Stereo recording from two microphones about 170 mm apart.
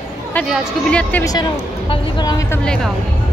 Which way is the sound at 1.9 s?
25° left (ahead or behind).